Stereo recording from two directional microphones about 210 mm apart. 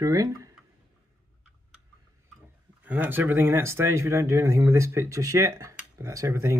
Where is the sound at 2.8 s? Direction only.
10° right (ahead or behind).